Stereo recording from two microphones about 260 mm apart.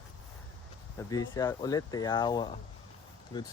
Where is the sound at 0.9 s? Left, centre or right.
Centre.